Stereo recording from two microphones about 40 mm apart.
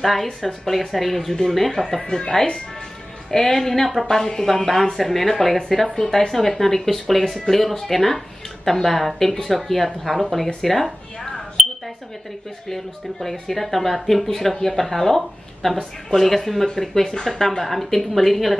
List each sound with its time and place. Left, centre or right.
0.0 s speech: centre
12.6 s speech: centre